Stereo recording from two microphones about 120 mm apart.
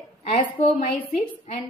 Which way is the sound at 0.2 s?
75° left (ahead or behind).